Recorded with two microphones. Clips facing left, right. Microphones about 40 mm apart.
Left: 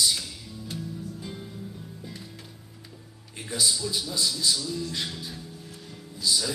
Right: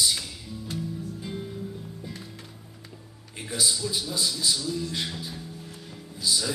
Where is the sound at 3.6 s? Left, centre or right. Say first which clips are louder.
Even; centre.